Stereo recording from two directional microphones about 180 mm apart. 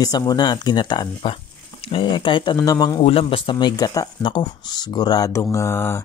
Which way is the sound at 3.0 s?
35° left (ahead or behind).